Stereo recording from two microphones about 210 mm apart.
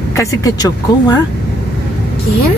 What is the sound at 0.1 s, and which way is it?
Speech, 15° left (ahead or behind).